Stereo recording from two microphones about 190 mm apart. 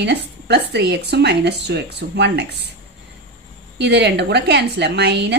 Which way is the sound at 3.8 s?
65° right (ahead or behind).